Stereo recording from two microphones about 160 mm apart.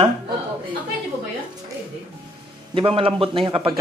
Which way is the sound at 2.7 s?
35° right (ahead or behind).